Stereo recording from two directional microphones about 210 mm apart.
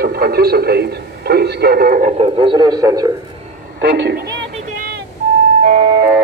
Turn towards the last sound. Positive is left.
turn(degrees=-15)  # may be behind; listen again after turning